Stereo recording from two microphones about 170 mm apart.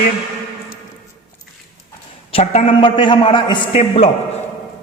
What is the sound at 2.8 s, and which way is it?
A man's voice, 30° left (ahead or behind).